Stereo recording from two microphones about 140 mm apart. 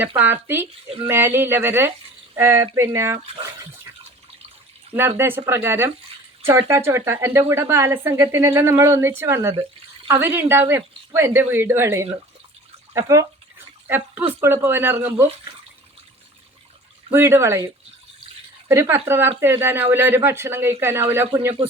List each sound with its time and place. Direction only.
0.2 s speech: 15° right (ahead or behind)
4.9 s speech: 15° right (ahead or behind)
17.1 s speech: 15° right (ahead or behind)
18.7 s speech: 20° right (ahead or behind)